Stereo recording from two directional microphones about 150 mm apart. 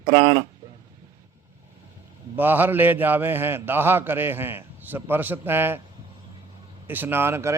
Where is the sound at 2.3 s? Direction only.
15° right (ahead or behind).